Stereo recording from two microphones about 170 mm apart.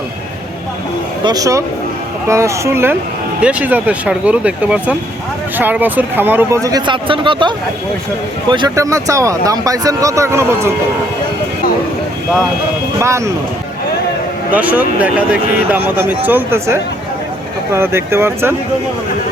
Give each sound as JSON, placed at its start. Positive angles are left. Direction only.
{"t": 1.2, "sound": "speech", "side_deg": -20}
{"t": 13.0, "sound": "speech", "side_deg": -15}
{"t": 14.5, "sound": "speech", "side_deg": -10}